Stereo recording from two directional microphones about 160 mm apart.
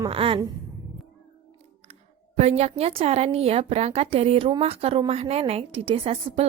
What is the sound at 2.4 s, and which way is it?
A woman's voice, 40° right (ahead or behind).